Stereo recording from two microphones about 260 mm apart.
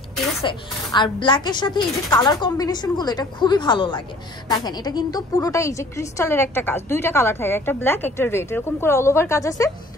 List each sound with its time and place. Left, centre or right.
0.4 s a woman's voice: centre